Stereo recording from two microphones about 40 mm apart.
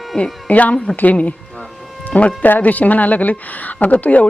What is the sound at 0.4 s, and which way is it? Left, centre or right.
Speech, left.